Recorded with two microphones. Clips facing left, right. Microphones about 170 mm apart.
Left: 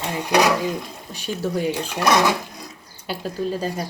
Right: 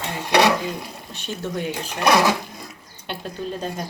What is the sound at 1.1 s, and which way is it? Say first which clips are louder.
Dishes: left 4 dB; 10° left (ahead or behind).